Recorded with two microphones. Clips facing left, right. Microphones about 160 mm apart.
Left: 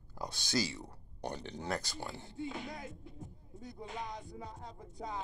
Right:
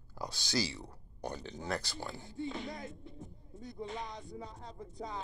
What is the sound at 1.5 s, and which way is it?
Speech, 30° left (ahead or behind).